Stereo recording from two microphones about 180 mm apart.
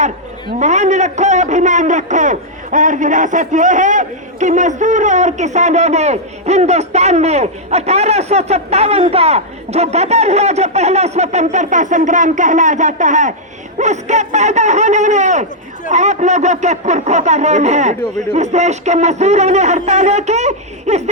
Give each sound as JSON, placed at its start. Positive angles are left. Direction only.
{"t": 0.6, "sound": "a man's voice", "side_deg": -40}